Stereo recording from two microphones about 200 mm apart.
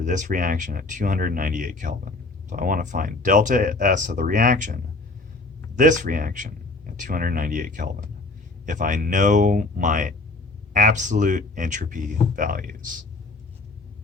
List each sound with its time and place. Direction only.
0.0 s speech: 40° right (ahead or behind)